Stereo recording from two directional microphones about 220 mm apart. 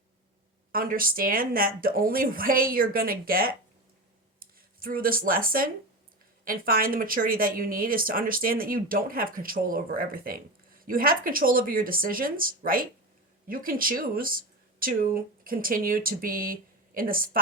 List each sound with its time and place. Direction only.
0.7 s speech: 40° right (ahead or behind)